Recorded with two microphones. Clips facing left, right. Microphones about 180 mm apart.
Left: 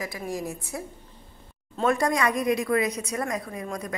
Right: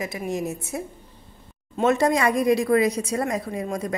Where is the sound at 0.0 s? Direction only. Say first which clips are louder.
Right 4 dB; 20° right (ahead or behind).